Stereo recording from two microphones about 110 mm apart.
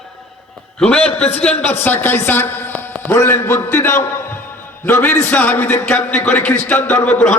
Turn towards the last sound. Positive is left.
turn(degrees=10)  # may be behind; listen again after turning